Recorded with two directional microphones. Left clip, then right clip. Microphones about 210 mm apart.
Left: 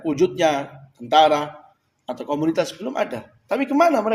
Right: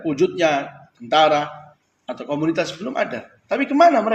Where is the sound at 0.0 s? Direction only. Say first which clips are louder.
Even; 45° left (ahead or behind).